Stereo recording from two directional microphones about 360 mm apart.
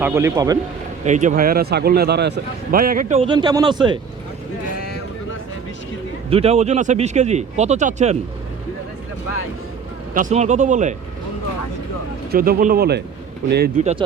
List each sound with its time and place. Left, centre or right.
0.0 s a man's voice: centre
6.3 s speech: centre
10.2 s speech: centre
12.3 s speech: right